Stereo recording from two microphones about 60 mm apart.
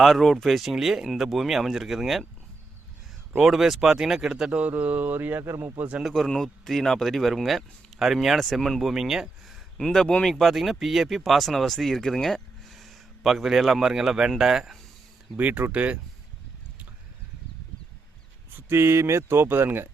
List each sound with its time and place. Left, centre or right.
0.0 s speech: centre
3.4 s speech: centre
4.6 s speech: right
5.4 s speech: right
6.0 s speech: centre
9.7 s speech: centre
15.4 s speech: right
18.5 s speech: right